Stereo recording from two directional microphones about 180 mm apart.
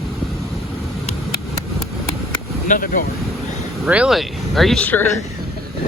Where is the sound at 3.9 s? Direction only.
5° right (ahead or behind).